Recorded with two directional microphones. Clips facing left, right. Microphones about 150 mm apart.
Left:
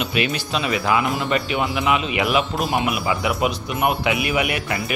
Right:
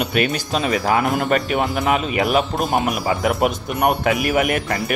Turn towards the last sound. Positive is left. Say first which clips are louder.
# right 3 dB
turn(degrees=-45)  # may be behind; listen again after turning